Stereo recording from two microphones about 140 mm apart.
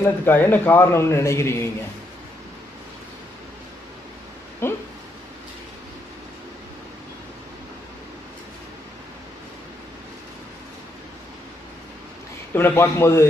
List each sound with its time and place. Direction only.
0.2 s a man's voice: 15° left (ahead or behind)
4.6 s a sound: 15° left (ahead or behind)
12.5 s speech: 15° left (ahead or behind)